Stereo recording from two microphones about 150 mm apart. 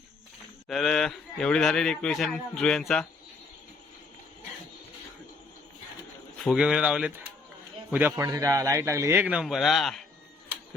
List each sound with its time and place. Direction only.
0.7 s a man's voice: centre (ahead or behind)
6.4 s a man's voice: 5° right (ahead or behind)
8.1 s a man's voice: 25° right (ahead or behind); by 10.0 s centre (ahead or behind)